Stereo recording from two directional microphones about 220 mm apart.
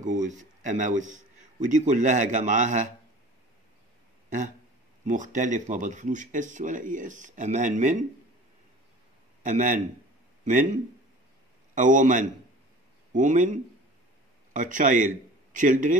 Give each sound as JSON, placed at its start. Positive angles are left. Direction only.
{"t": 0.0, "sound": "a man's voice", "side_deg": -35}
{"t": 5.0, "sound": "speech", "side_deg": -35}
{"t": 9.4, "sound": "a man's voice", "side_deg": -35}
{"t": 11.7, "sound": "speech", "side_deg": -35}